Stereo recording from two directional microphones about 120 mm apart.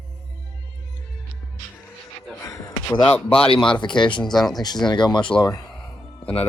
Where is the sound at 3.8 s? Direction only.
40° left (ahead or behind).